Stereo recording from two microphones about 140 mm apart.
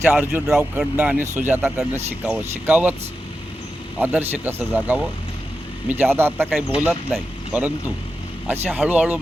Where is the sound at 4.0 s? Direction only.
15° right (ahead or behind).